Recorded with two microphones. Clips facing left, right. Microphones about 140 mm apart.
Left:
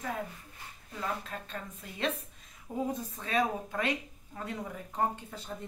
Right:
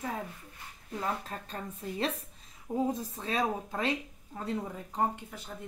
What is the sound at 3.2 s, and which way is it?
Speech, 25° right (ahead or behind).